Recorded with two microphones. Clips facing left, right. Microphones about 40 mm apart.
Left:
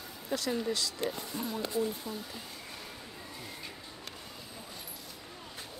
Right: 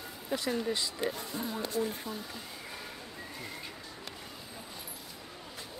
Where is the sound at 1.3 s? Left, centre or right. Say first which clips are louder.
Even; right.